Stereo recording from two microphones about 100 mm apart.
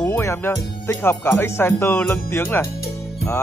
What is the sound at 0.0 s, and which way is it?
Music, 30° left (ahead or behind).